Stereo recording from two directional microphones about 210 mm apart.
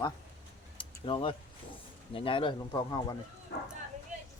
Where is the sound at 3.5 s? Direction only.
50° left (ahead or behind).